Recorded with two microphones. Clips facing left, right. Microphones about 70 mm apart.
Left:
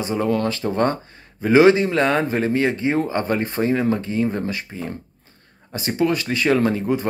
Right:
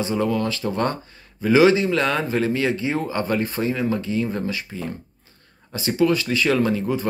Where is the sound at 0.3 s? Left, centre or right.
Left.